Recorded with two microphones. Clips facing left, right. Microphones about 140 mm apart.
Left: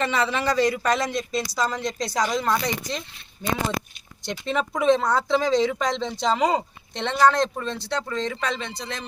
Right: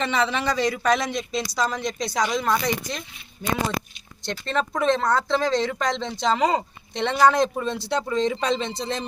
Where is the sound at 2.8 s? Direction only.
10° right (ahead or behind).